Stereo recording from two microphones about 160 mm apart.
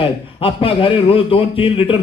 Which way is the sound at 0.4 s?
35° left (ahead or behind).